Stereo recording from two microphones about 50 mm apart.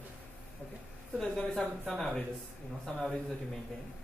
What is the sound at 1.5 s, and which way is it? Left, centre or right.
Speech, centre.